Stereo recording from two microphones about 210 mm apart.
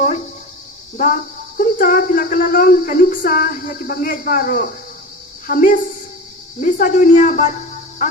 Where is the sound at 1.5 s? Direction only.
40° left (ahead or behind).